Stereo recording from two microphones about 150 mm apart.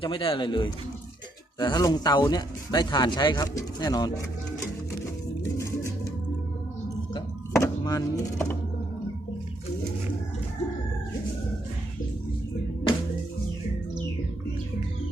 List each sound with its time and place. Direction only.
0.0 s speech: 35° left (ahead or behind)
7.5 s music: 20° left (ahead or behind)